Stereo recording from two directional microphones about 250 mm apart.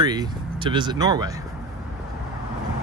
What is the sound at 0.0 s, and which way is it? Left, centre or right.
Speech, centre.